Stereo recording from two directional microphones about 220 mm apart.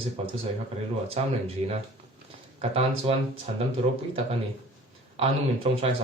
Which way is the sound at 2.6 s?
25° right (ahead or behind).